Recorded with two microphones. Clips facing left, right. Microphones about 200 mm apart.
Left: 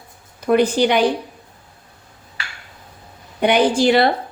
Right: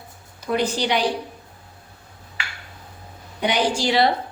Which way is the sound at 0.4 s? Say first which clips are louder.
Left 7 dB; 55° left (ahead or behind).